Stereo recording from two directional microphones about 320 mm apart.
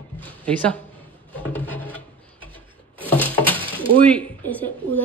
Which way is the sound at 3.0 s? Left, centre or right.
Centre.